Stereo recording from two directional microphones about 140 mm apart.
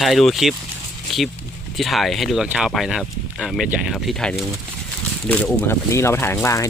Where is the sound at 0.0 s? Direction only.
Centre (ahead or behind).